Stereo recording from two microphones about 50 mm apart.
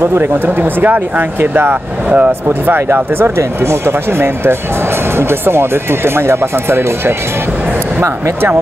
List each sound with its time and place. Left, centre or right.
0.0 s speech: right
0.6 s speech: right